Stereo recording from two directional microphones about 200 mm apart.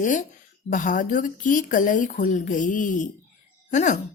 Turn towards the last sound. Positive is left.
turn(degrees=35)  # may be behind; listen again after turning